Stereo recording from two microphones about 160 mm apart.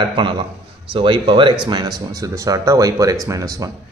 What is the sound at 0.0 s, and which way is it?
Speech, 30° right (ahead or behind).